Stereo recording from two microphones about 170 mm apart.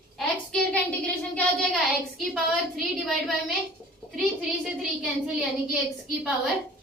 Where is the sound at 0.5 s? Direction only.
10° left (ahead or behind).